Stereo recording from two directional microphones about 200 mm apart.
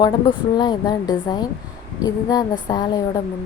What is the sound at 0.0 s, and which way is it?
Speech, 20° left (ahead or behind).